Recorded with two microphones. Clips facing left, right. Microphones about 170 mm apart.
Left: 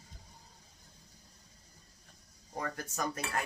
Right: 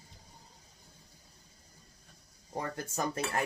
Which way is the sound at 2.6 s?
30° right (ahead or behind).